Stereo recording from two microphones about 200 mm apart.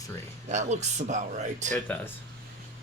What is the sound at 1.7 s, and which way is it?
Speech, 5° left (ahead or behind).